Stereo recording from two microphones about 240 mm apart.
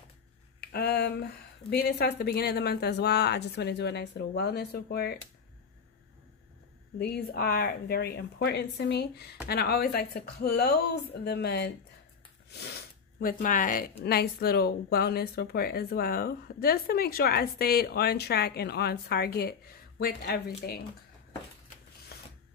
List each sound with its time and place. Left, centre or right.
0.6 s speech: left
7.0 s speech: left
22.1 s a sound: left